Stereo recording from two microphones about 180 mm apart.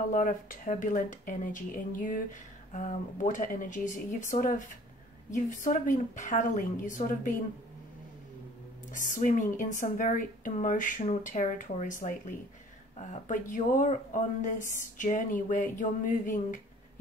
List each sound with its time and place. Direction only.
0.1 s speech: 45° left (ahead or behind)
8.9 s speech: 45° left (ahead or behind)